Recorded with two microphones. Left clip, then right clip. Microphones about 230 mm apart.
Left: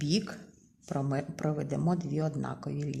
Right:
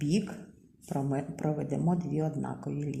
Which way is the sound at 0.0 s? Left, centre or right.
Left.